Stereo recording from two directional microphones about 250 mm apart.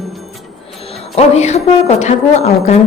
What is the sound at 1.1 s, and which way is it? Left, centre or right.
A woman's voice, left.